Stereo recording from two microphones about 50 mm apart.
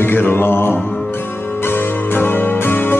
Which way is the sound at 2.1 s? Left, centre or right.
Left.